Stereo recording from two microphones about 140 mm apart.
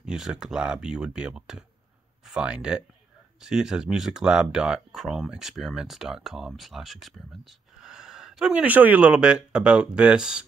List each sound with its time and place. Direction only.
0.0 s speech: 5° right (ahead or behind)